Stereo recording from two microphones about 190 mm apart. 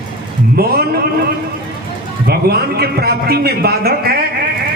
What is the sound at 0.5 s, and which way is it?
Speech, 55° right (ahead or behind).